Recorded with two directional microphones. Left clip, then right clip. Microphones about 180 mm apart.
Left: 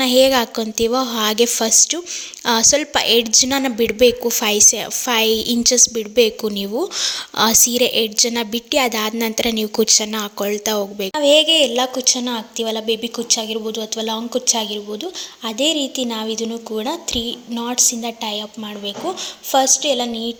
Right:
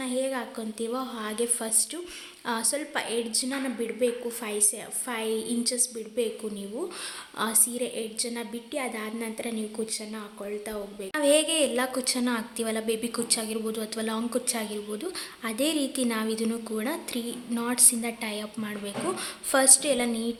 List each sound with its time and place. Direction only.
0.0 s a woman's voice: 50° left (ahead or behind)
11.1 s a woman's voice: 25° left (ahead or behind)
19.5 s a woman's voice: 10° left (ahead or behind)